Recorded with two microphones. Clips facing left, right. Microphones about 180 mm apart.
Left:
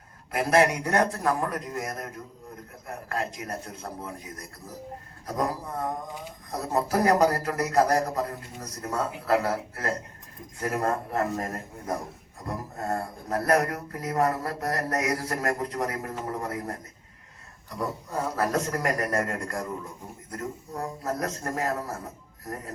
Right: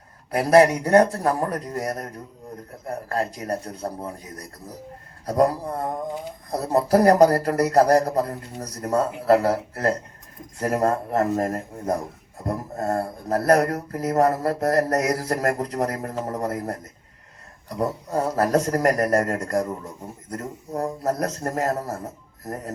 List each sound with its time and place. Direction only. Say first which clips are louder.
0.3 s a man's voice: right 6 dB; 40° right (ahead or behind)